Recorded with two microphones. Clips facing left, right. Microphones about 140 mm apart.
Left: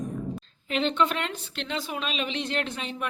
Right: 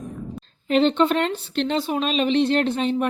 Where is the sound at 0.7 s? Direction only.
35° right (ahead or behind).